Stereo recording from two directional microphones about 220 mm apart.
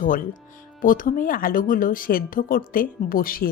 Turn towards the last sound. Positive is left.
turn(degrees=40)  # may be behind; listen again after turning